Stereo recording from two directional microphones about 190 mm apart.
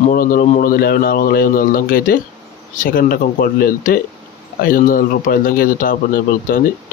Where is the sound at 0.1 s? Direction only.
50° left (ahead or behind).